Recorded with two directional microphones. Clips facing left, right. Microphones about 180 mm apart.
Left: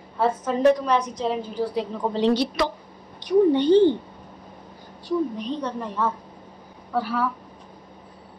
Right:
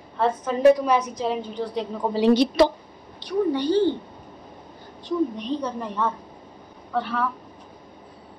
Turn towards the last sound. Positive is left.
turn(degrees=5)  # may be behind; listen again after turning